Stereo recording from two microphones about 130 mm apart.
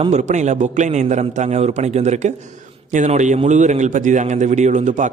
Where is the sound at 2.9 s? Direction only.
70° right (ahead or behind).